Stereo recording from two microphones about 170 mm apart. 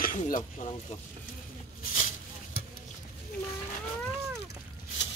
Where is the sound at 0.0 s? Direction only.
55° left (ahead or behind).